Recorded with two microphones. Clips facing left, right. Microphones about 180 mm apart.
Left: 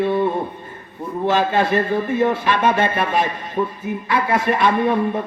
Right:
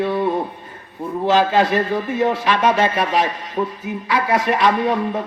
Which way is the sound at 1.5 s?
50° left (ahead or behind).